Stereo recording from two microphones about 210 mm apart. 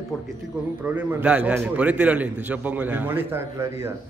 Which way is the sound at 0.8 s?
5° right (ahead or behind).